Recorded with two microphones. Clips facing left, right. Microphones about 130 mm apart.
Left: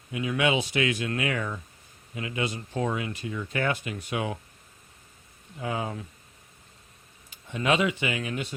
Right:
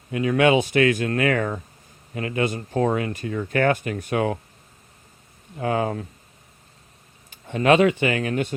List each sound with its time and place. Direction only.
0.1 s speech: 50° right (ahead or behind)
5.5 s speech: 60° right (ahead or behind)
7.3 s speech: 50° right (ahead or behind)